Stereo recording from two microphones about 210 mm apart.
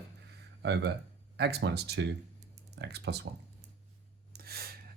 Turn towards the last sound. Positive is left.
turn(degrees=-45)  # may be behind; listen again after turning